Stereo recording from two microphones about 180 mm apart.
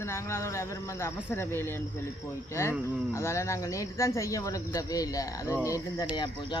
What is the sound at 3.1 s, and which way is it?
Speech, 15° left (ahead or behind).